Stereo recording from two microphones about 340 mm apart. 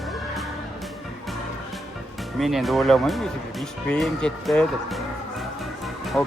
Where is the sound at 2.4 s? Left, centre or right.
Centre.